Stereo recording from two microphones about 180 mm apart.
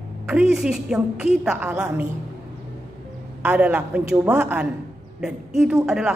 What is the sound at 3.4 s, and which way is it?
A woman's voice, 10° right (ahead or behind).